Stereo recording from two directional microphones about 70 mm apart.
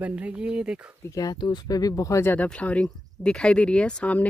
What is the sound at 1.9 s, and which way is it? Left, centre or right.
Speech, left.